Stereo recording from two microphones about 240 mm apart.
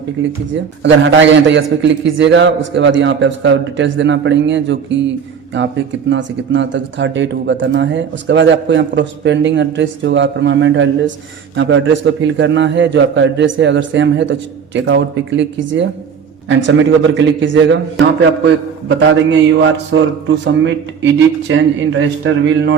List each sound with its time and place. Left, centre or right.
0.2 s speech: right
18.9 s speech: right